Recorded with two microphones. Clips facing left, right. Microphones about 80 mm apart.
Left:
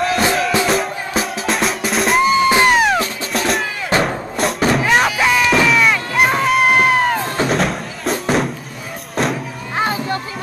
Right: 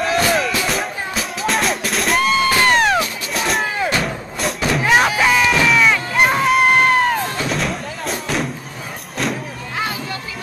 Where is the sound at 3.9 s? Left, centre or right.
Left.